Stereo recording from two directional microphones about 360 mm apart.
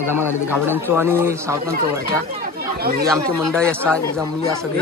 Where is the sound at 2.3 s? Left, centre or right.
Right.